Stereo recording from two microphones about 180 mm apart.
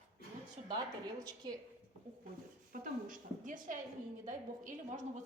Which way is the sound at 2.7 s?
50° right (ahead or behind).